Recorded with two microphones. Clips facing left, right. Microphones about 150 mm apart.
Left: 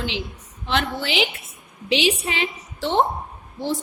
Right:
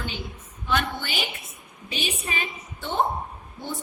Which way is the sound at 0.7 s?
85° left.